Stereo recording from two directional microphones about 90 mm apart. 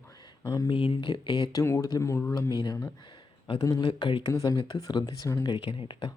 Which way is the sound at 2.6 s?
45° left (ahead or behind).